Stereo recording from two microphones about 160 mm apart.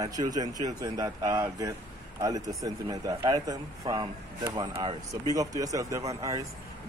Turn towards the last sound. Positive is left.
turn(degrees=-20)  # may be behind; listen again after turning